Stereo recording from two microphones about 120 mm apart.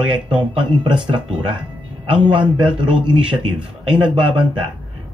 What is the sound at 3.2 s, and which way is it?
Speech, 10° right (ahead or behind).